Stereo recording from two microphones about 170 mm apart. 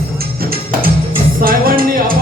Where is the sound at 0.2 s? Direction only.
60° right (ahead or behind).